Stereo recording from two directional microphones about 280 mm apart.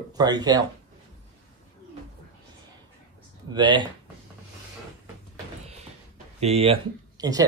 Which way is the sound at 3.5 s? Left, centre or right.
Centre.